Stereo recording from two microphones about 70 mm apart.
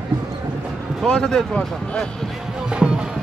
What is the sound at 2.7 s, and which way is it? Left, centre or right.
Music, centre.